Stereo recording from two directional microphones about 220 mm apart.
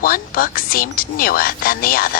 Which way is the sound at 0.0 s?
40° left (ahead or behind).